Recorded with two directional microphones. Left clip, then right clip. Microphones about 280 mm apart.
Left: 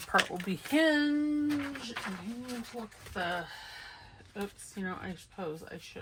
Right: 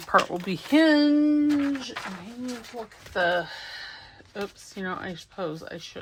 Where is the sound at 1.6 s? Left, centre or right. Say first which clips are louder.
Right 9 dB; right.